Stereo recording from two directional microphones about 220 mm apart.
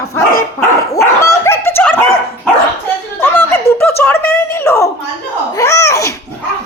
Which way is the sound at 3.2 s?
10° left (ahead or behind).